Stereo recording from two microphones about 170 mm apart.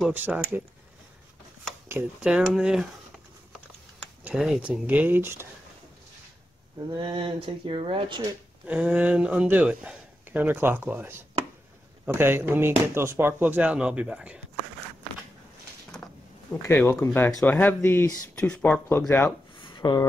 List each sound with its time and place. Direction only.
0.0 s speech: 10° right (ahead or behind)
1.9 s speech: 10° right (ahead or behind)
4.2 s speech: 5° right (ahead or behind)
6.9 s speech: 25° right (ahead or behind)
8.2 s speech: 10° right (ahead or behind)
16.6 s speech: 15° left (ahead or behind)
19.5 s a sound: 30° left (ahead or behind)